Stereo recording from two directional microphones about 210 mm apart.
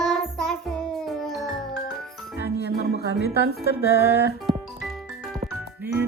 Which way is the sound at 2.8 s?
50° left (ahead or behind).